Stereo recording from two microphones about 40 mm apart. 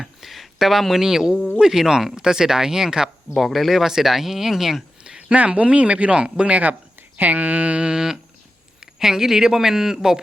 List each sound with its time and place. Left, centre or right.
0.0 s a sound: centre
1.0 s speech: centre
3.3 s speech: centre
5.0 s a sound: right
5.5 s speech: right
6.5 s speech: right
7.8 s speech: centre